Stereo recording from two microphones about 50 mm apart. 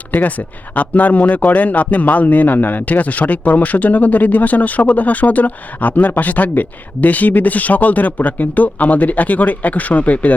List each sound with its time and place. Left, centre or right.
0.1 s speech: left